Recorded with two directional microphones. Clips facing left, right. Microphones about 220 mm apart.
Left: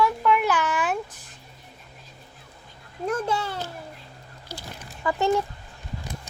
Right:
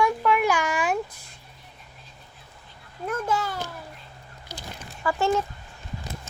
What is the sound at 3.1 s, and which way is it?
Speech, 30° left (ahead or behind).